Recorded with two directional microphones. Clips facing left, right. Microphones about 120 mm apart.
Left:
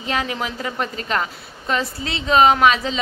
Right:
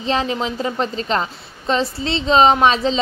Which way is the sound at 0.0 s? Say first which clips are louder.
Right 4 dB; 25° right (ahead or behind).